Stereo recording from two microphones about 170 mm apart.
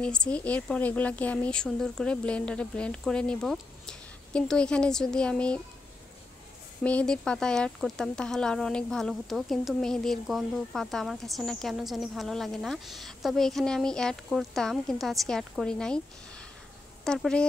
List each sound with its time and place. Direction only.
0.0 s speech: 5° left (ahead or behind)
6.8 s speech: 10° left (ahead or behind)
17.0 s speech: 5° left (ahead or behind)